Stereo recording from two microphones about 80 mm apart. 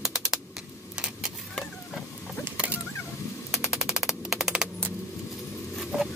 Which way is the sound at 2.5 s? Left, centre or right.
Centre.